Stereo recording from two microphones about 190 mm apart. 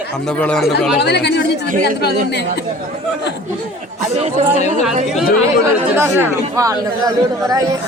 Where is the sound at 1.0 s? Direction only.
60° left (ahead or behind).